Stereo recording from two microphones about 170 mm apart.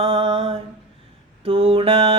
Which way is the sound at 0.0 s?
35° right (ahead or behind).